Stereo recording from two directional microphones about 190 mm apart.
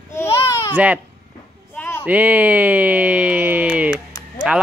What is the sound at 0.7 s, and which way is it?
Speech, 5° right (ahead or behind).